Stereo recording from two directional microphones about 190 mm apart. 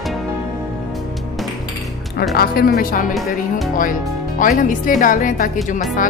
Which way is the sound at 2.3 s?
55° left (ahead or behind).